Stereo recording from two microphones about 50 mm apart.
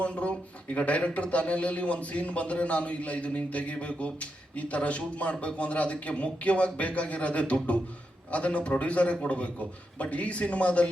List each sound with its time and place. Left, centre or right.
0.0 s speech: left